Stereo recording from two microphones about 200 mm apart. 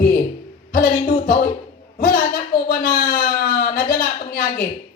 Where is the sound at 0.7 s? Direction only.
45° left (ahead or behind).